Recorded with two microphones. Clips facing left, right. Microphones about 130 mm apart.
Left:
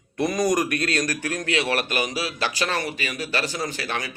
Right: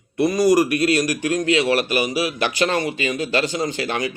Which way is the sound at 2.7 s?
20° right (ahead or behind).